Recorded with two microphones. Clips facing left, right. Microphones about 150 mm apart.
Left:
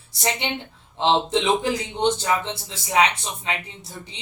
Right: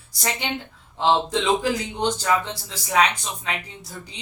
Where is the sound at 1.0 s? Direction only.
20° left (ahead or behind).